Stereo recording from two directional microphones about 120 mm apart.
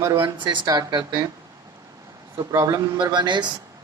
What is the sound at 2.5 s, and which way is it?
Speech, 25° right (ahead or behind).